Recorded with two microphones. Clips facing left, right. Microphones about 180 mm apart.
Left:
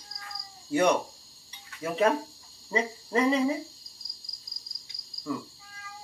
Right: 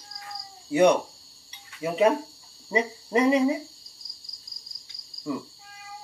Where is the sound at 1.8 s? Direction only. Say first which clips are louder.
Right 3 dB; 15° right (ahead or behind).